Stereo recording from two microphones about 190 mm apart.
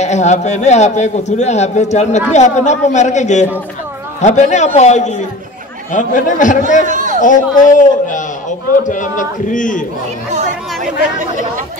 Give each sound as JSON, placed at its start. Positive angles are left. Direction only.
{"t": 0.0, "sound": "a man's voice", "side_deg": 35}
{"t": 6.9, "sound": "a sound", "side_deg": -40}
{"t": 7.2, "sound": "a man's voice", "side_deg": 45}